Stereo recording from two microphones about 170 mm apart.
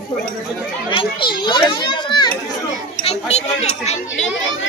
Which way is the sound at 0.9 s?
30° left (ahead or behind).